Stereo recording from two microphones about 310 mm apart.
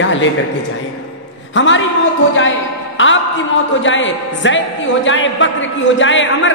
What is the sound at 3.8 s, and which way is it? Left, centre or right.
A man's voice, left.